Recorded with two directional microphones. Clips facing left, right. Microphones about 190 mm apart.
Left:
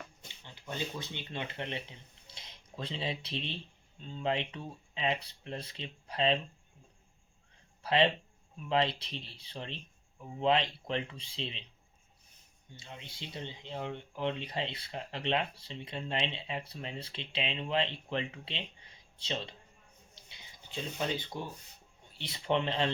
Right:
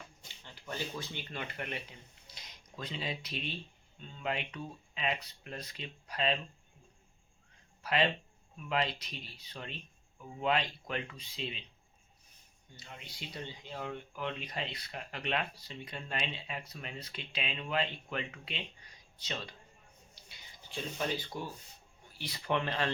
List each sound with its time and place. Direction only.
0.5 s speech: 20° left (ahead or behind)
7.8 s a sound: 30° left (ahead or behind)
8.7 s speech: 30° left (ahead or behind)
12.7 s speech: 25° left (ahead or behind)
20.1 s a sound: 20° left (ahead or behind)
21.3 s speech: 20° left (ahead or behind)